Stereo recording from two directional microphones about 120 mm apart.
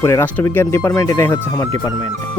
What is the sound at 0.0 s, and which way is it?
Speech, 20° left (ahead or behind).